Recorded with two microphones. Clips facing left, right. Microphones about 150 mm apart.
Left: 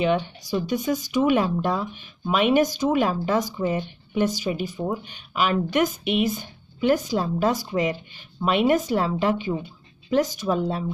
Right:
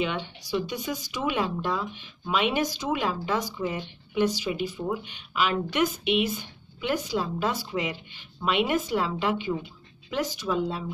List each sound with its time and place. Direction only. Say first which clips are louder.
0.0 s speech: left 7 dB; 45° left (ahead or behind)